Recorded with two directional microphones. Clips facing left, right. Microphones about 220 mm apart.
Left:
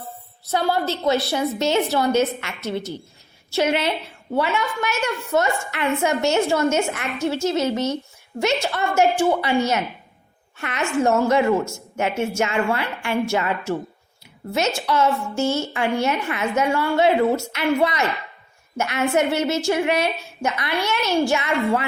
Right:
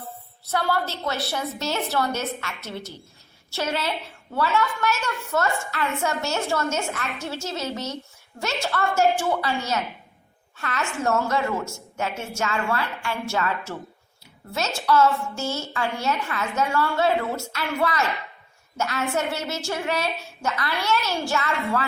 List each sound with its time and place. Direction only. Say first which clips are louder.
0.5 s a woman's voice: left 4 dB; 20° left (ahead or behind)
14.8 s a woman's voice: even; 20° left (ahead or behind)